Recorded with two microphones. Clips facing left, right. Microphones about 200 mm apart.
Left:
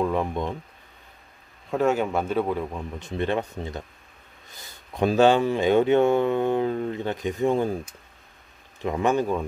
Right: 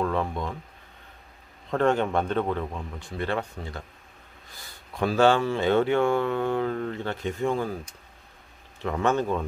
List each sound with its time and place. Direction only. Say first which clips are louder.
0.0 s speech: left 2 dB; 15° left (ahead or behind)
1.7 s speech: left 1 dB; 5° left (ahead or behind)
3.0 s speech: left 4 dB; 20° left (ahead or behind)
4.9 s speech: left 3 dB; 20° left (ahead or behind)
8.8 s speech: left 2 dB; 15° left (ahead or behind)